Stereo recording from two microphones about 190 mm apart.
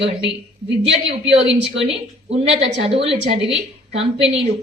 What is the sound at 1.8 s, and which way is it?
A woman's voice, 30° right (ahead or behind).